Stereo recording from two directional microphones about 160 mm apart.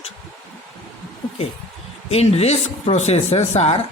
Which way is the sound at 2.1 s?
40° left (ahead or behind).